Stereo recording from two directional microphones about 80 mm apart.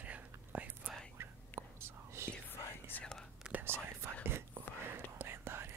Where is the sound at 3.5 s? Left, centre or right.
Right.